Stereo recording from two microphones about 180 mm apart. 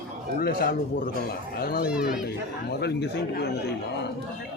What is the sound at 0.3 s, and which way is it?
Speech, 60° left (ahead or behind).